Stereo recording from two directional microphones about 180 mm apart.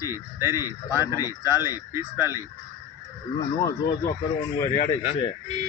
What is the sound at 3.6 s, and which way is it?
Speech, 15° left (ahead or behind).